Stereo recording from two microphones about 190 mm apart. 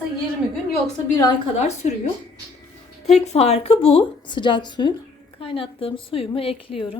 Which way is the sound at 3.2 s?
35° left (ahead or behind).